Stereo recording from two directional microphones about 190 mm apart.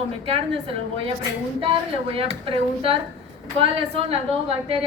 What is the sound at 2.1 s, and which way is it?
A woman's voice, 30° right (ahead or behind).